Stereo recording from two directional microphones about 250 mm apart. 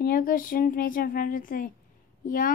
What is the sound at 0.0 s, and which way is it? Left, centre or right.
Speech, left.